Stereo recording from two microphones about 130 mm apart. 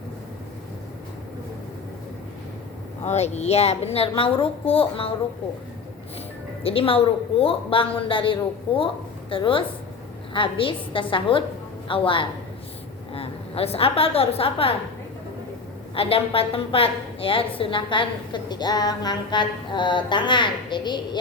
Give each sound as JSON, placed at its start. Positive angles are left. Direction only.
{"t": 3.0, "sound": "a woman's voice", "side_deg": 60}
{"t": 6.6, "sound": "a woman's voice", "side_deg": 45}
{"t": 16.0, "sound": "a woman's voice", "side_deg": 45}